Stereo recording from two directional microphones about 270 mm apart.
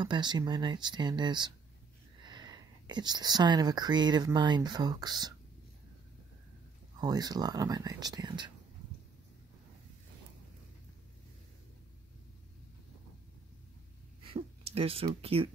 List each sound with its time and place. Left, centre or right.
0.0 s speech: centre
7.0 s speech: centre
14.3 s speech: right